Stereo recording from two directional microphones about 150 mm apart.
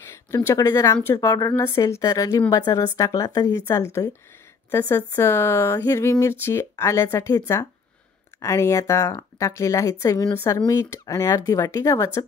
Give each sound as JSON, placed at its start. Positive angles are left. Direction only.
{"t": 0.3, "sound": "speech", "side_deg": 20}